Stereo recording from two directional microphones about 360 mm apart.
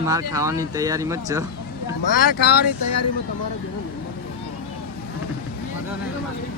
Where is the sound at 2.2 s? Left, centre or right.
Left.